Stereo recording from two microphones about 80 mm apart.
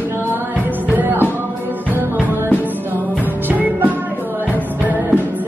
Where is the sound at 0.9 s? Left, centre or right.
Right.